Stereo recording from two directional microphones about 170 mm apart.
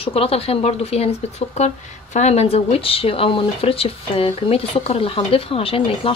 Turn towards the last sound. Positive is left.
turn(degrees=35)  # may be behind; listen again after turning